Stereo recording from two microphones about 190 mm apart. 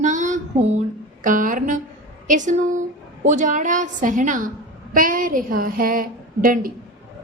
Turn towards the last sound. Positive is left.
turn(degrees=-45)  # may be behind; listen again after turning